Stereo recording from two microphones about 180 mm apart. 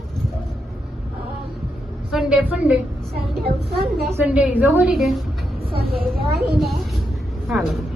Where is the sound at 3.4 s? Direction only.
60° right (ahead or behind).